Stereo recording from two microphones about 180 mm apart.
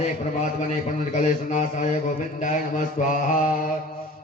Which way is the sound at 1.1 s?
40° left (ahead or behind).